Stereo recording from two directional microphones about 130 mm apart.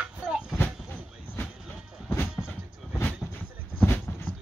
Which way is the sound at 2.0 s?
20° left (ahead or behind).